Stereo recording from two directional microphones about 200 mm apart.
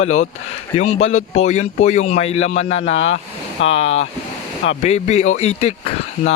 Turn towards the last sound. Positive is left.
turn(degrees=30)  # may be behind; listen again after turning